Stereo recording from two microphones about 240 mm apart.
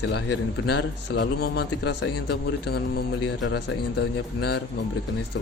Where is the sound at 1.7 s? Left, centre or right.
Left.